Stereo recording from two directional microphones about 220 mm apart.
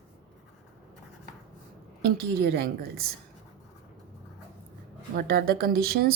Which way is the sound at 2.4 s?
45° right (ahead or behind).